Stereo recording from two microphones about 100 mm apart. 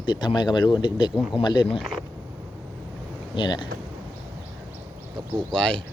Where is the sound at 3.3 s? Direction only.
50° left (ahead or behind).